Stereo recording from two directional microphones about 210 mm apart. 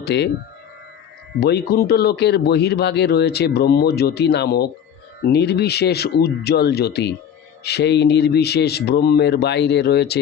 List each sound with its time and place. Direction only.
0.0 s speech: 55° left (ahead or behind)
1.4 s speech: 50° left (ahead or behind)